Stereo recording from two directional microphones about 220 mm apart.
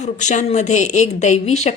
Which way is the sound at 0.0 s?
35° left (ahead or behind).